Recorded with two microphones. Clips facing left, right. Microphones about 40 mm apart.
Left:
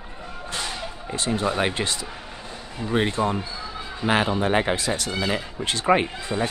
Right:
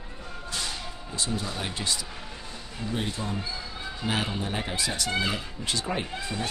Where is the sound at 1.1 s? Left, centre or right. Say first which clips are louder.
Left 8 dB; left.